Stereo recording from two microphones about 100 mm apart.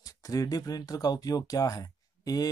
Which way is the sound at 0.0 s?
35° left (ahead or behind).